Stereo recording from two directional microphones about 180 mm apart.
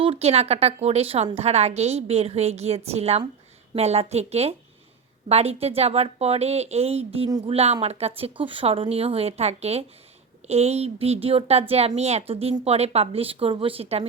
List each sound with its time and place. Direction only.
0.0 s a woman's voice: 35° right (ahead or behind)
7.3 s speech: 20° right (ahead or behind)
7.5 s a woman's voice: 35° right (ahead or behind)